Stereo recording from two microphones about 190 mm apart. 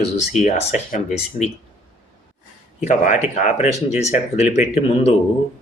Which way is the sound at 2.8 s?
40° left (ahead or behind).